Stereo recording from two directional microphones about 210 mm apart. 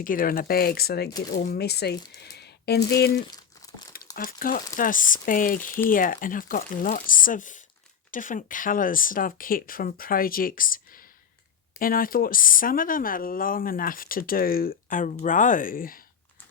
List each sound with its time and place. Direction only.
0.0 s speech: 40° left (ahead or behind)
3.2 s crumpling: 20° left (ahead or behind)
3.9 s speech: 40° left (ahead or behind)